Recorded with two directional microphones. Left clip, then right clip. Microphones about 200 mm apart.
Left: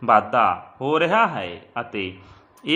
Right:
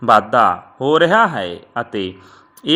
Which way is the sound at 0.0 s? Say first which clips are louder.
Right 5 dB; 30° right (ahead or behind).